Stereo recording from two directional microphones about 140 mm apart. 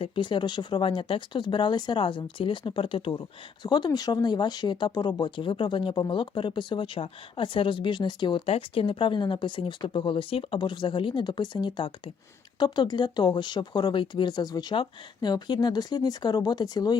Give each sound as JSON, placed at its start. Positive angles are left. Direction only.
{"t": 0.0, "sound": "speech", "side_deg": 35}